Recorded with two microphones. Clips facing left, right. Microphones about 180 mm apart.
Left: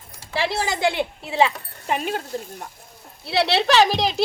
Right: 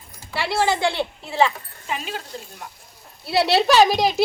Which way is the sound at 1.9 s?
55° left (ahead or behind).